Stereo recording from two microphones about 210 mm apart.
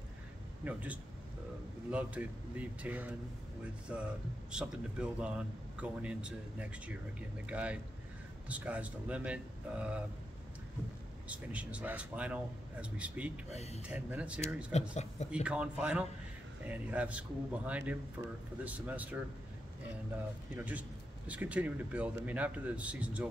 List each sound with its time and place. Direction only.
0.7 s a man's voice: 5° right (ahead or behind)
11.2 s a man's voice: 5° right (ahead or behind)
13.5 s speech: 30° left (ahead or behind)
13.8 s a man's voice: 5° right (ahead or behind)
14.7 s speech: 30° left (ahead or behind)
15.4 s a man's voice: 5° right (ahead or behind)
21.3 s a man's voice: 5° right (ahead or behind)